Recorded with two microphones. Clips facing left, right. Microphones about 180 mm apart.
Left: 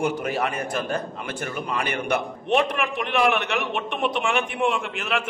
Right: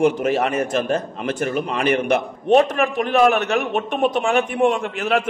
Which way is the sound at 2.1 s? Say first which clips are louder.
Right 5 dB; 40° right (ahead or behind).